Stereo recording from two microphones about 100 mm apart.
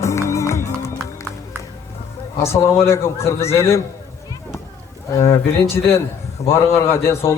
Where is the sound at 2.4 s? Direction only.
25° left (ahead or behind).